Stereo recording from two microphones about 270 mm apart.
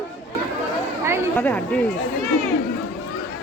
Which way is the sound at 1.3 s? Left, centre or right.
Centre.